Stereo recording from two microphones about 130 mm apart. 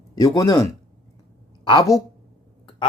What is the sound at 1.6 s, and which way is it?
Speech, 35° left (ahead or behind).